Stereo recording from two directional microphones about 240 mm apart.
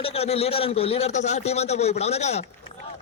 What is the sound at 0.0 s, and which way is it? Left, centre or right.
A man's voice, left.